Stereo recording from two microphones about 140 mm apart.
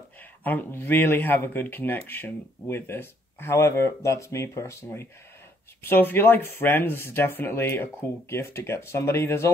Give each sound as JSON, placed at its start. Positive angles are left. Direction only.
{"t": 0.4, "sound": "speech", "side_deg": 15}